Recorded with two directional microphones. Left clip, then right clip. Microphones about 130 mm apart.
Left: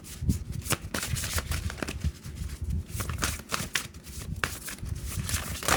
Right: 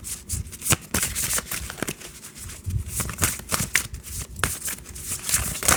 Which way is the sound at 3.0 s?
50° right (ahead or behind).